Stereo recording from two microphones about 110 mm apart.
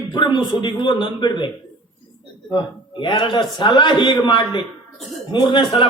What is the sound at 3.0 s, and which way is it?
A man's voice, 45° left (ahead or behind).